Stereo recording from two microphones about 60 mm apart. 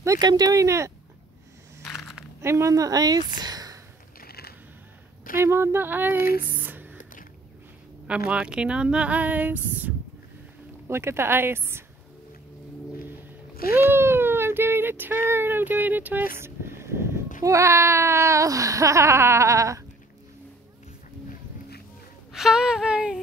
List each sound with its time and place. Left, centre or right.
0.0 s a sound: right
2.4 s speech: right
5.4 s speech: right
5.9 s speech: right
8.1 s speech: centre
10.9 s speech: right
13.8 s speech: right
16.3 s a sound: right
17.4 s a sound: right
22.3 s speech: centre